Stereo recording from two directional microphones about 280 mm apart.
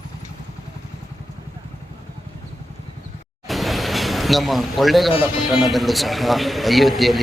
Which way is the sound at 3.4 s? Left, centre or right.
Centre.